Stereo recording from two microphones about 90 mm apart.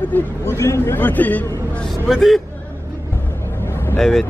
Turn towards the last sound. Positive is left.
turn(degrees=5)  # may be behind; listen again after turning